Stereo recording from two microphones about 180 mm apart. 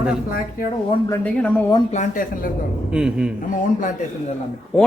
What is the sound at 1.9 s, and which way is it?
Speech, 45° left (ahead or behind).